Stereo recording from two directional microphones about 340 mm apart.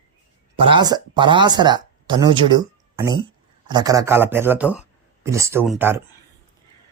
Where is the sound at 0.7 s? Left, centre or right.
Centre.